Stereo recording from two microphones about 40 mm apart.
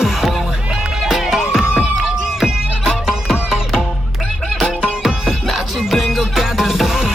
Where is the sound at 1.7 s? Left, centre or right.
Right.